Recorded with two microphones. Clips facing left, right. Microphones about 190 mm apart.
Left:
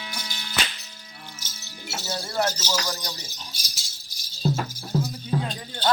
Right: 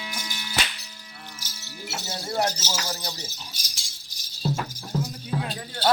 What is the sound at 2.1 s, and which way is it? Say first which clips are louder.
Speech: left 1 dB; 20° right (ahead or behind).